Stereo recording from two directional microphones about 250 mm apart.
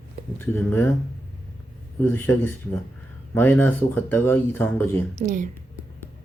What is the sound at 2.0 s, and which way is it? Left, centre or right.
Speech, centre.